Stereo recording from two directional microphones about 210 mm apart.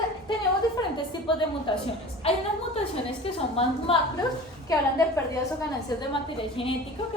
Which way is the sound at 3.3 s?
25° left (ahead or behind).